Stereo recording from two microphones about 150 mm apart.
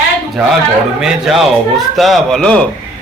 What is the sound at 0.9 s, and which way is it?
A man's voice, 5° right (ahead or behind).